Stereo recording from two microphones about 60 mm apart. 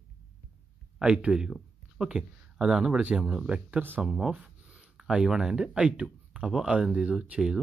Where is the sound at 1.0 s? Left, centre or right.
Centre.